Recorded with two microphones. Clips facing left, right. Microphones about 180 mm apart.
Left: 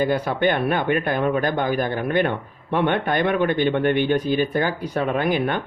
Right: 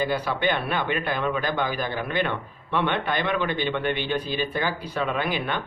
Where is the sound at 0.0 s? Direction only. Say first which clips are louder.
Left 5 dB; 50° left (ahead or behind).